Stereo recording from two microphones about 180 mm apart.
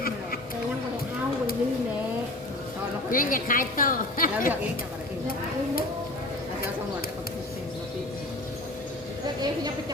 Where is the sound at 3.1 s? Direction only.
50° left (ahead or behind).